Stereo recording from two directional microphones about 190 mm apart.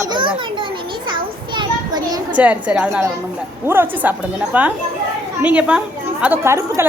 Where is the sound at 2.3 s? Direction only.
5° right (ahead or behind).